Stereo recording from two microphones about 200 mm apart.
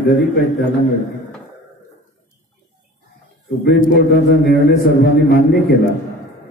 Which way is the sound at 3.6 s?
50° left (ahead or behind).